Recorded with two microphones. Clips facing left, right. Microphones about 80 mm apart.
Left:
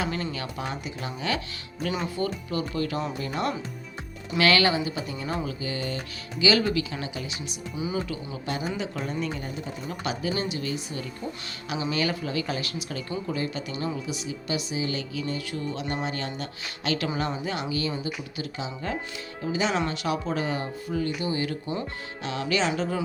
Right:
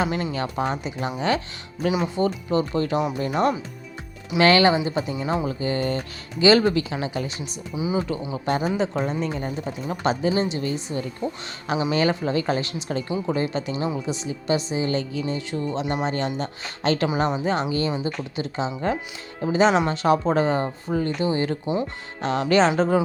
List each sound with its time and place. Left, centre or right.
0.0 s speech: right
1.9 s speech: centre
2.1 s speech: right
4.9 s speech: right
5.2 s speech: right
5.5 s speech: right
7.8 s speech: centre
8.0 s speech: right